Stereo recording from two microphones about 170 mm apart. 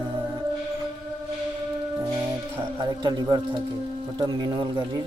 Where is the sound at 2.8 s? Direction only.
25° right (ahead or behind).